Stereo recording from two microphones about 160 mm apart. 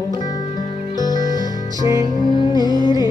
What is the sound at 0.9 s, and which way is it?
Music, 25° left (ahead or behind).